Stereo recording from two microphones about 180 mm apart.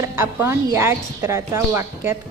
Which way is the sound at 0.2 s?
15° right (ahead or behind).